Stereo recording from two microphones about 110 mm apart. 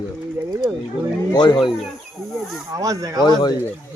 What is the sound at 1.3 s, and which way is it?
Speech, 40° left (ahead or behind).